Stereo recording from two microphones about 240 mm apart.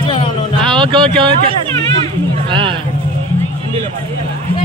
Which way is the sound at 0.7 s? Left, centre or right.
Centre.